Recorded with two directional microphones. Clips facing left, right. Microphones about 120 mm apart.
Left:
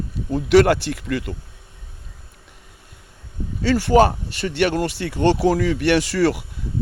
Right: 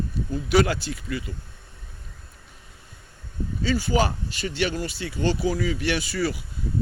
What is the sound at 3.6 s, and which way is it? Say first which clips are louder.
Speech: left 8 dB; 70° left (ahead or behind).